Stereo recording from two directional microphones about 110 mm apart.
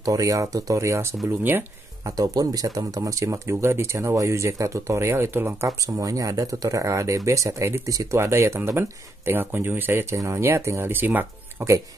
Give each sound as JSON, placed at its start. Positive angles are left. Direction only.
{"t": 0.0, "sound": "speech", "side_deg": -30}
{"t": 2.1, "sound": "speech", "side_deg": -35}
{"t": 5.7, "sound": "speech", "side_deg": -30}